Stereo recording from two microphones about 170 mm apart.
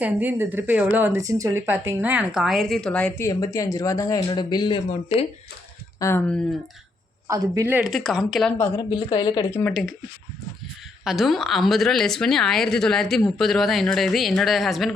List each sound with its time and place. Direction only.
0.0 s speech: 10° right (ahead or behind); by 4.8 s 25° left (ahead or behind)
4.9 s speech: 40° left (ahead or behind)
6.0 s speech: 15° left (ahead or behind)
7.3 s speech: 20° right (ahead or behind); by 8.5 s centre (ahead or behind)
8.5 s speech: 15° left (ahead or behind)
8.9 s a woman's voice: 30° left (ahead or behind)
9.5 s speech: 15° left (ahead or behind)
11.0 s speech: centre (ahead or behind)